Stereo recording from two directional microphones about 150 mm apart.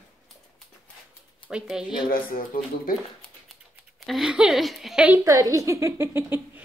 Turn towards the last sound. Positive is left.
turn(degrees=-15)  # may be behind; listen again after turning